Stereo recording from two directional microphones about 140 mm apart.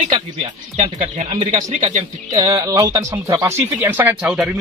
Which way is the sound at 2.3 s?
25° right (ahead or behind).